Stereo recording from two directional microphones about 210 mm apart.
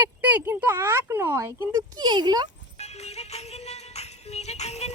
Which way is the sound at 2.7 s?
30° left (ahead or behind).